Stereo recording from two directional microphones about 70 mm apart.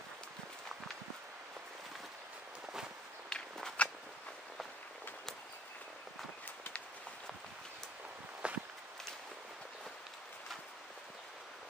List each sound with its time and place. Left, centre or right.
3.3 s walk: centre
8.4 s walk: centre